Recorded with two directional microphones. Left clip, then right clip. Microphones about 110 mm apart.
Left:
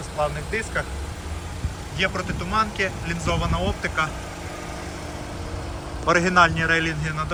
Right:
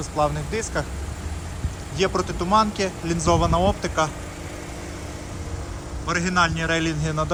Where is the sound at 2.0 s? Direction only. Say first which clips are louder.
Right 2 dB; 35° right (ahead or behind).